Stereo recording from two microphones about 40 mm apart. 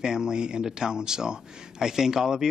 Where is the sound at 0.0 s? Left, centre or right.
Centre.